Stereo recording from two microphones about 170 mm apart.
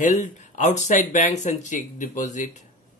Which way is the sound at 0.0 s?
45° left (ahead or behind).